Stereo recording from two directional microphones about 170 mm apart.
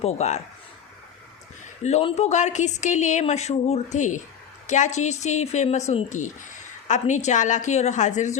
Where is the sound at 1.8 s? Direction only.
40° left (ahead or behind).